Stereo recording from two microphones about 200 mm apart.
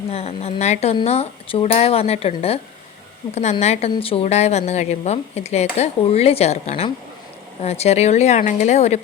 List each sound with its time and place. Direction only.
0.1 s a woman's voice: 30° left (ahead or behind)